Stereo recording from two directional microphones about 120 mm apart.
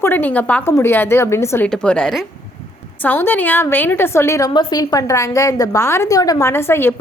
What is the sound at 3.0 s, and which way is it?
A woman's voice, 15° left (ahead or behind).